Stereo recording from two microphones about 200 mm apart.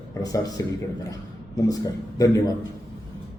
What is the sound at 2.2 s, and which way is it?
Speech, 15° left (ahead or behind).